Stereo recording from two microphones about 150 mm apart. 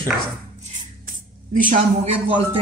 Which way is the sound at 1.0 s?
65° right (ahead or behind).